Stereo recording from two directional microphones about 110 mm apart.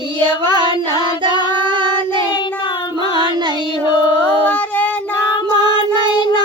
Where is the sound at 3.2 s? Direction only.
40° right (ahead or behind).